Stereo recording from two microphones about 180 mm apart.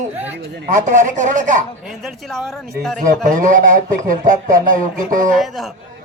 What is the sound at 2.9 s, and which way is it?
Speech, 45° right (ahead or behind).